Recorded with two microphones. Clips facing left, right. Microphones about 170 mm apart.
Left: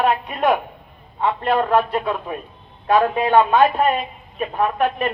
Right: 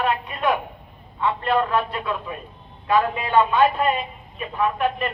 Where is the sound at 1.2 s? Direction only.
50° left (ahead or behind).